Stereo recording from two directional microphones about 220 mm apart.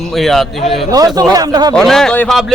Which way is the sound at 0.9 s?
15° right (ahead or behind).